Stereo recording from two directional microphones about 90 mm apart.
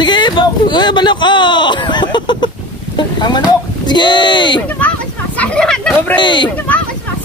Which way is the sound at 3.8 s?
55° left (ahead or behind).